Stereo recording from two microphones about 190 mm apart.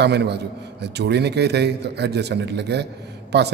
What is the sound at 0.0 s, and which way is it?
A man's voice, 60° right (ahead or behind).